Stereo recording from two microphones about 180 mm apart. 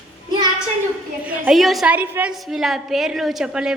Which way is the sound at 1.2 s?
10° right (ahead or behind).